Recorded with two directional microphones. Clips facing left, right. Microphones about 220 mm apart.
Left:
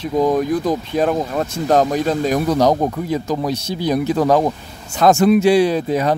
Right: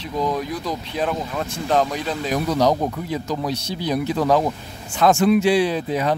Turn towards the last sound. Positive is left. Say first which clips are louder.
# left 4 dB
turn(degrees=45)  # may be behind; listen again after turning